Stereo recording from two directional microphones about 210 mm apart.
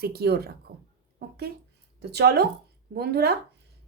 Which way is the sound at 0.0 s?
50° right (ahead or behind).